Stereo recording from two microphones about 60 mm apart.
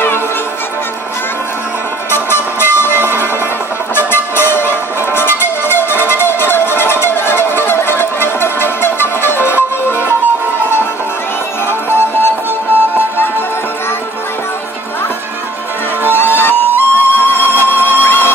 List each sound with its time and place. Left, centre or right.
2.0 s music: left
11.6 s music: left
16.1 s music: left